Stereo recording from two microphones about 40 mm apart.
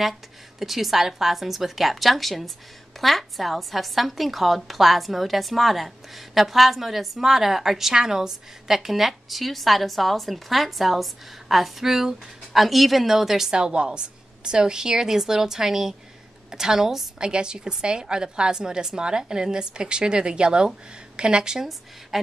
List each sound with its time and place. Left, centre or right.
0.6 s speech: centre
13.5 s a woman's voice: right
22.1 s a sound: centre